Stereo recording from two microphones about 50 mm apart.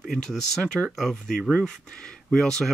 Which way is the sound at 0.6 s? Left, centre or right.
Centre.